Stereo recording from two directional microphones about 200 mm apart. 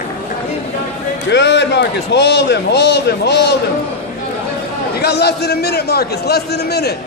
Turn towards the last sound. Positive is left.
turn(degrees=55)  # may be behind; listen again after turning